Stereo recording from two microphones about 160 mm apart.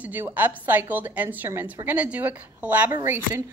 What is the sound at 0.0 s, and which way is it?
A woman's voice, 10° right (ahead or behind).